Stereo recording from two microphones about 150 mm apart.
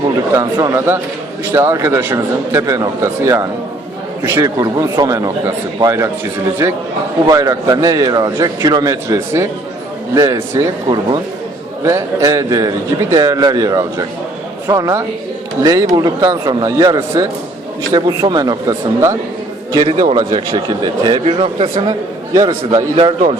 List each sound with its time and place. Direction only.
0.3 s a man's voice: 25° right (ahead or behind)
7.3 s a man's voice: 25° right (ahead or behind)
11.8 s a man's voice: 20° right (ahead or behind)
21.2 s a man's voice: 40° right (ahead or behind)